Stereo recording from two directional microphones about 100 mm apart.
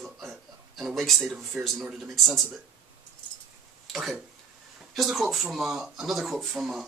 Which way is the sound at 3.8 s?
Centre (ahead or behind).